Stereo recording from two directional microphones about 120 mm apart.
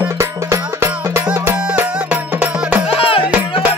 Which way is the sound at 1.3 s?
10° right (ahead or behind).